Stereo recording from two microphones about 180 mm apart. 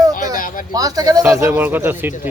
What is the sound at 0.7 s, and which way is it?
Speech, 20° right (ahead or behind).